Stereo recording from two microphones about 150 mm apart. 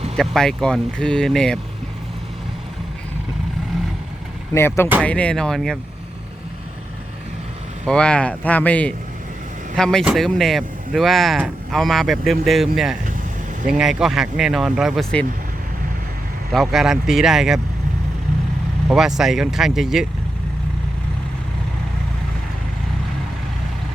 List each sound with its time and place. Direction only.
0.2 s speech: 5° left (ahead or behind)
4.5 s speech: 15° left (ahead or behind)
7.9 s speech: 5° left (ahead or behind)
16.5 s speech: centre (ahead or behind)
18.9 s speech: 5° right (ahead or behind)